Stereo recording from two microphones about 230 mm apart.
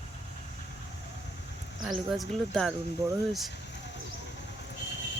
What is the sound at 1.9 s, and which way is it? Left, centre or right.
Speech, centre.